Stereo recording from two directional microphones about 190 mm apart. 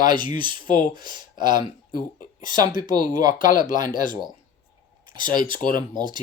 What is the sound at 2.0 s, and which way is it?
Speech, 45° left (ahead or behind).